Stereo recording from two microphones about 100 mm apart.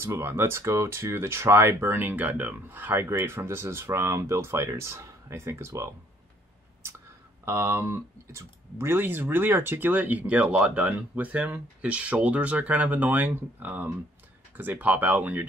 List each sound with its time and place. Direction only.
0.0 s speech: 25° right (ahead or behind)
7.4 s speech: 25° right (ahead or behind)